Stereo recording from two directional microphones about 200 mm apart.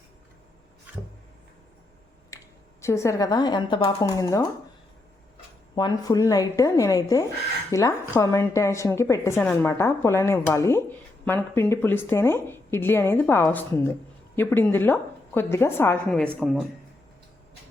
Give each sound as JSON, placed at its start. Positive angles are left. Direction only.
{"t": 2.3, "sound": "finger snapping", "side_deg": 15}
{"t": 2.8, "sound": "a woman's voice", "side_deg": 15}
{"t": 5.7, "sound": "a woman's voice", "side_deg": 20}